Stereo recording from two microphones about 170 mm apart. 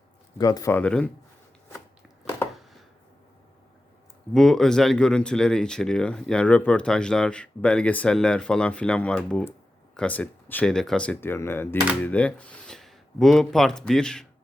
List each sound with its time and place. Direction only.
0.3 s speech: 20° left (ahead or behind)
0.8 s speech: 5° left (ahead or behind)
4.4 s speech: centre (ahead or behind)